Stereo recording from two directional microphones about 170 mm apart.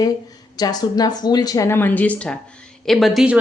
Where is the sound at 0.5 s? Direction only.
25° left (ahead or behind).